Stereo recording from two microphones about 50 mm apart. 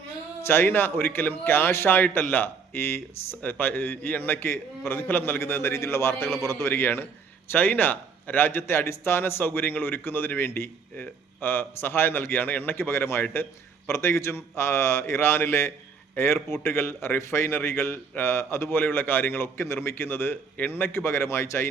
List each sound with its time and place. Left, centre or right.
0.4 s a man's voice: left
5.4 s a man's voice: left
6.7 s a man's voice: left
9.4 s a man's voice: left